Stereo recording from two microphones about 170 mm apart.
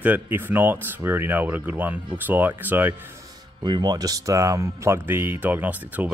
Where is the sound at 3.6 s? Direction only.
25° right (ahead or behind).